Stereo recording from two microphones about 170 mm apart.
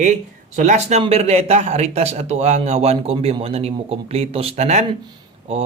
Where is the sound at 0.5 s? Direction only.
45° right (ahead or behind).